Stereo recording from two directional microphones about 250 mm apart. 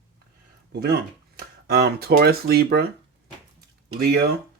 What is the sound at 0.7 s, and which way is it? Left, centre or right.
Speech, right.